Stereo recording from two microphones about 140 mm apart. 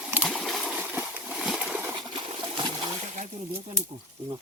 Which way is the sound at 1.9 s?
35° right (ahead or behind).